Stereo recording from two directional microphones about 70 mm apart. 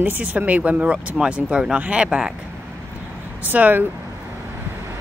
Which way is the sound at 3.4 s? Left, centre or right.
Right.